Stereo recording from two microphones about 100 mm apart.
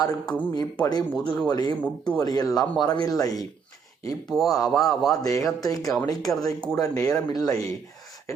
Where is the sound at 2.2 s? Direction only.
40° left (ahead or behind).